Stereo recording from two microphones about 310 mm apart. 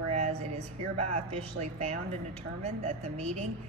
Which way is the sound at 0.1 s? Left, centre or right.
Right.